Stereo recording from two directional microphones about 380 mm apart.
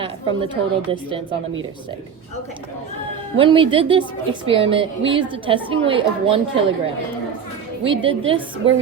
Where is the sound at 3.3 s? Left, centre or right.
Centre.